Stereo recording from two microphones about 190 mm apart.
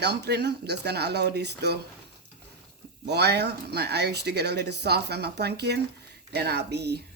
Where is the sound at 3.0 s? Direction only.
60° right (ahead or behind).